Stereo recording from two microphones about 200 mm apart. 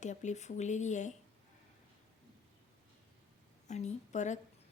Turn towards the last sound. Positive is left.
turn(degrees=35)  # may be behind; listen again after turning